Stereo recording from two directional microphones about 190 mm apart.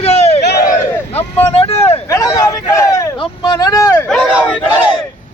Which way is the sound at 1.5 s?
30° left (ahead or behind).